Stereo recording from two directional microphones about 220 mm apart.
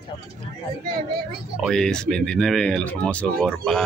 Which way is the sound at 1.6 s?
Centre (ahead or behind).